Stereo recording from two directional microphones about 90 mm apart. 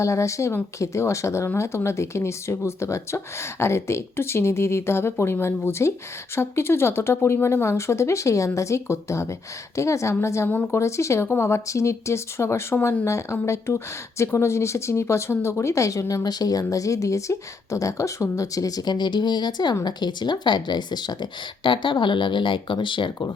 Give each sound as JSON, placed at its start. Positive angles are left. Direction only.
{"t": 0.0, "sound": "speech", "side_deg": 35}